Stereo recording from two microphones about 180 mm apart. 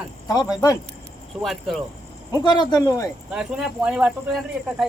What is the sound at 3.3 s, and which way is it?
Speech, 5° right (ahead or behind).